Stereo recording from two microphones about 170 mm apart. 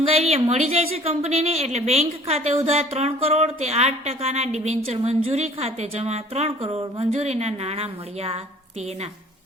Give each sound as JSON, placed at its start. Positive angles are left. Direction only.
{"t": 0.2, "sound": "a woman's voice", "side_deg": -35}